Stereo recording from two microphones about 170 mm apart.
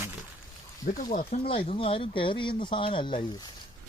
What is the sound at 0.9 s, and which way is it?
Speech, 55° left (ahead or behind).